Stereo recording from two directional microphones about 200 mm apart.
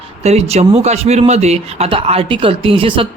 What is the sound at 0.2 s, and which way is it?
A woman's voice, 30° right (ahead or behind).